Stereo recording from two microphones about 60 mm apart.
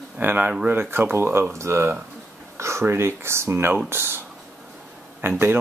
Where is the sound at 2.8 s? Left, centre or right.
Right.